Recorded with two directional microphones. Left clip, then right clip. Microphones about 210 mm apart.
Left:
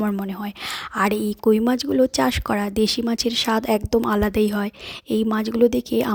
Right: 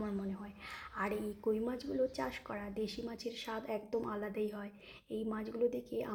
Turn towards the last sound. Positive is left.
turn(degrees=50)  # may be behind; listen again after turning